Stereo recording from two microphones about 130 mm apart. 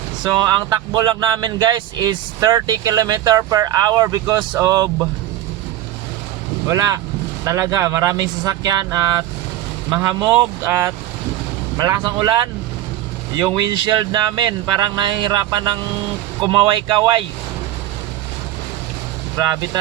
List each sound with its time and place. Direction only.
0.2 s speech: 30° right (ahead or behind)
6.7 s speech: 25° right (ahead or behind)
13.6 s speech: 35° right (ahead or behind)
19.4 s speech: 30° right (ahead or behind)